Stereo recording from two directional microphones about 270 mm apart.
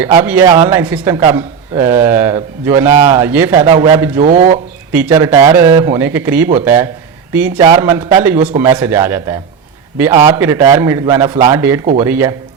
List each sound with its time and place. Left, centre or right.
0.0 s a man's voice: centre
4.2 s speech: right
4.9 s a man's voice: centre